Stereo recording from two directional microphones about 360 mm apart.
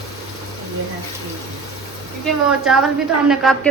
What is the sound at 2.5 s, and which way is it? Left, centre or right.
A woman's voice, centre.